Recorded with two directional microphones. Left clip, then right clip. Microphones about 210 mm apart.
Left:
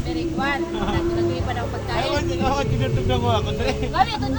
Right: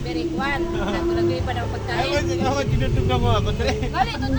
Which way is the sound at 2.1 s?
50° right (ahead or behind).